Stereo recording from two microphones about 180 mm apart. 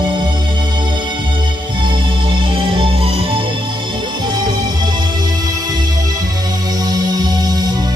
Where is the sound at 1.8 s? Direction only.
25° right (ahead or behind).